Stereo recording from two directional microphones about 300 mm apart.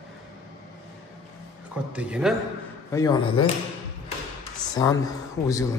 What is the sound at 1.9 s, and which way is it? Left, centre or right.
Speech, centre.